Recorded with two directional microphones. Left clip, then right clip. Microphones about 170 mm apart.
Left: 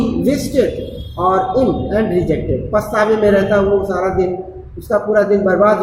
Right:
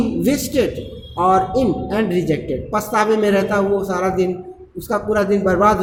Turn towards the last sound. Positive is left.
turn(degrees=-50)  # may be behind; listen again after turning